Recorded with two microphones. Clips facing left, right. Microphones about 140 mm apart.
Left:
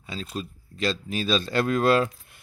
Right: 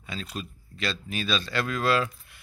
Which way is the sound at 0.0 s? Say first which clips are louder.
Left 2 dB; 30° left (ahead or behind).